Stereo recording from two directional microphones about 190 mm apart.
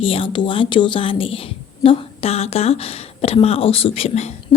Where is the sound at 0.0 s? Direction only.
30° left (ahead or behind).